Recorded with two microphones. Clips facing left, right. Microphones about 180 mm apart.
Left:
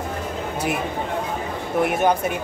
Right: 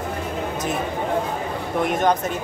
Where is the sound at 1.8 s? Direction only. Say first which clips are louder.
Even; 10° left (ahead or behind).